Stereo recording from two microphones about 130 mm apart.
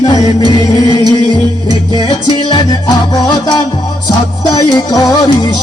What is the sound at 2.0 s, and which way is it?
Music, 35° left (ahead or behind).